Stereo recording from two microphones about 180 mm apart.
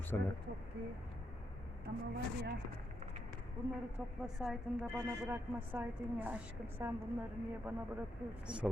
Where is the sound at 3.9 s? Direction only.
5° right (ahead or behind).